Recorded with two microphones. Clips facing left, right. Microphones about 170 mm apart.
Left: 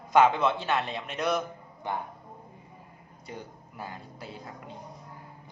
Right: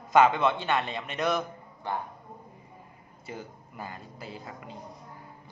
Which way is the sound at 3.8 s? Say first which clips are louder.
Even; centre (ahead or behind).